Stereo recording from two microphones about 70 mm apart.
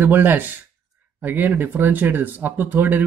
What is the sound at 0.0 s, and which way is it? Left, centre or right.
Speech, right.